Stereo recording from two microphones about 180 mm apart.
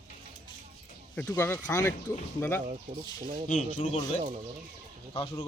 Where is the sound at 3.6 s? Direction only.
30° left (ahead or behind).